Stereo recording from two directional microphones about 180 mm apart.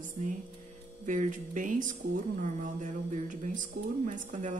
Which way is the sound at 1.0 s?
45° right (ahead or behind).